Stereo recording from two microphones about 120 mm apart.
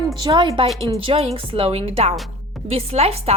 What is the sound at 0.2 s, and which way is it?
A woman's voice, 40° right (ahead or behind).